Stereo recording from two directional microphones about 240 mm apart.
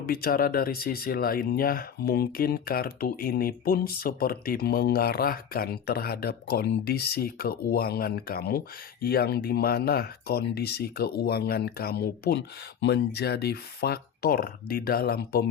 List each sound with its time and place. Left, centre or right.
0.0 s speech: left